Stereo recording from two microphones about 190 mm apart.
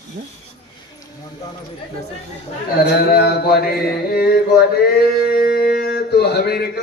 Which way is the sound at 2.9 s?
55° left (ahead or behind).